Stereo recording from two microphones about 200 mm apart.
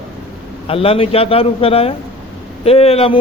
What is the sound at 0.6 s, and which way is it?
Speech, 30° left (ahead or behind).